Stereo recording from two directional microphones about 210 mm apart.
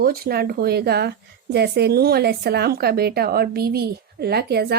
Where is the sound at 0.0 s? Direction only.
45° right (ahead or behind).